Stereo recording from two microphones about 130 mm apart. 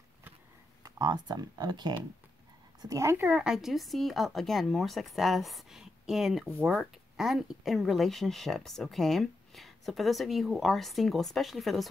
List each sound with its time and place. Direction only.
0.8 s speech: 30° right (ahead or behind)
3.3 s speech: 5° right (ahead or behind)